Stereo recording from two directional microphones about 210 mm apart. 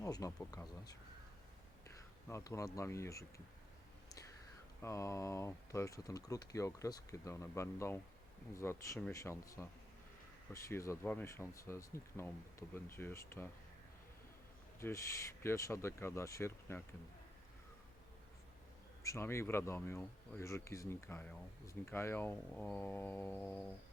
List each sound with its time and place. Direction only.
0.0 s speech: 15° left (ahead or behind)
2.3 s speech: 15° left (ahead or behind)
4.8 s speech: 15° left (ahead or behind)
14.8 s speech: 15° left (ahead or behind)
19.0 s speech: 15° left (ahead or behind)